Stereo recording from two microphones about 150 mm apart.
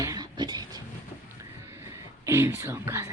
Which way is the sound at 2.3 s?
20° right (ahead or behind).